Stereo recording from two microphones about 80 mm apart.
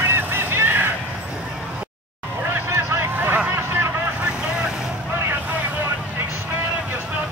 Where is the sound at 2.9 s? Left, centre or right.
Right.